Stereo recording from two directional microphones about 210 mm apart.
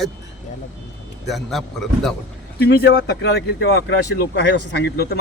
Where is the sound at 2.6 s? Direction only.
50° left (ahead or behind).